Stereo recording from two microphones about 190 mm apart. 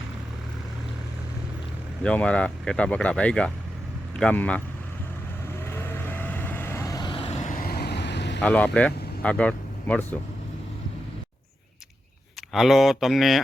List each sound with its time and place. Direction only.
2.0 s a man's voice: 5° left (ahead or behind)
5.6 s vehicle: 10° left (ahead or behind); by 8.4 s 65° left (ahead or behind)
8.4 s speech: 5° left (ahead or behind)
12.5 s speech: centre (ahead or behind)